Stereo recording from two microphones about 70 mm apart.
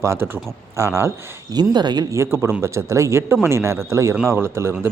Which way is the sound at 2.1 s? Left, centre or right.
Right.